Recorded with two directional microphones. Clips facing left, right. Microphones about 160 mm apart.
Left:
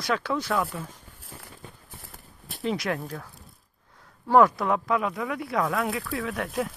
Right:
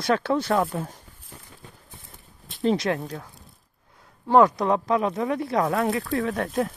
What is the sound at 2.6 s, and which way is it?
Speech, 30° right (ahead or behind).